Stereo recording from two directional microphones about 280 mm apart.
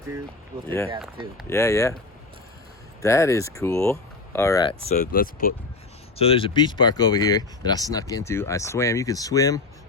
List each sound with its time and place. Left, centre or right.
1.5 s speech: centre
3.0 s speech: centre
4.9 s speech: left
6.1 s speech: centre